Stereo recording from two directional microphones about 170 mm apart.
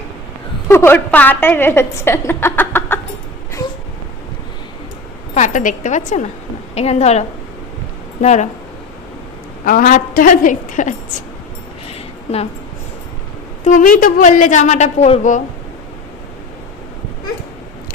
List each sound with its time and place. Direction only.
0.7 s a woman's voice: 15° left (ahead or behind)
5.3 s a woman's voice: 45° left (ahead or behind)
9.6 s a woman's voice: 55° left (ahead or behind)
11.9 s a sound: 40° left (ahead or behind)
13.7 s a woman's voice: 50° left (ahead or behind)